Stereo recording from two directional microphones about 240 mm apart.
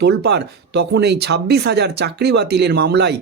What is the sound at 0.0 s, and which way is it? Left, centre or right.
Speech, right.